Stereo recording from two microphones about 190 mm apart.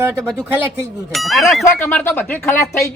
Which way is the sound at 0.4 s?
10° right (ahead or behind).